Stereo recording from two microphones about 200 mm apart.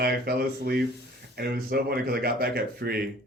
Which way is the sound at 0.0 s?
50° right (ahead or behind).